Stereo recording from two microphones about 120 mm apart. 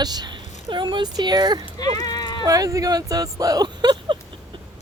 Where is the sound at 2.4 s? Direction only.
30° right (ahead or behind).